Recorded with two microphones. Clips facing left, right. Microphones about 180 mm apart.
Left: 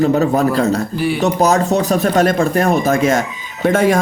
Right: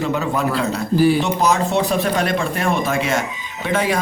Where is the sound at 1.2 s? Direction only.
40° left (ahead or behind).